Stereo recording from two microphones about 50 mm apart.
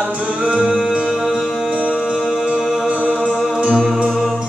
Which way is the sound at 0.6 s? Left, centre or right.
Centre.